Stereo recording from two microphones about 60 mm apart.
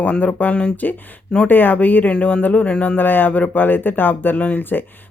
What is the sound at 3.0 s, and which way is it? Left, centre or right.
Speech, left.